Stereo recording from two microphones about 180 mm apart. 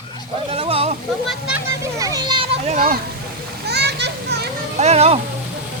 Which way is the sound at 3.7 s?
65° right (ahead or behind).